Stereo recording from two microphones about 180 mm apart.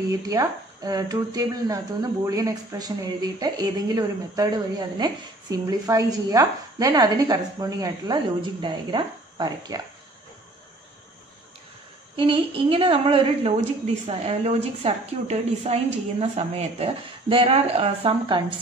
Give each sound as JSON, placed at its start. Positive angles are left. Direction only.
{"t": 0.3, "sound": "speech", "side_deg": -20}
{"t": 12.2, "sound": "a woman's voice", "side_deg": -30}